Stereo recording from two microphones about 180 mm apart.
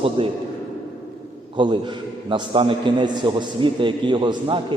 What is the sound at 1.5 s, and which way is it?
A man's voice, 25° right (ahead or behind).